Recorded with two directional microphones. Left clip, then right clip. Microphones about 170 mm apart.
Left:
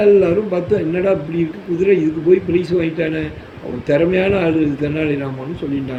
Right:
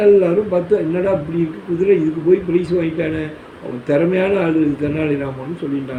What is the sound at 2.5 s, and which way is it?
A man's voice, 15° left (ahead or behind).